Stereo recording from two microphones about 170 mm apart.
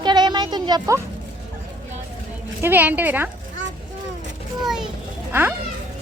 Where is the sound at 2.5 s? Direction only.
10° right (ahead or behind).